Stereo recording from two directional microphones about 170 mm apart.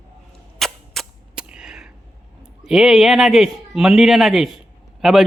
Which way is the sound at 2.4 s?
5° right (ahead or behind).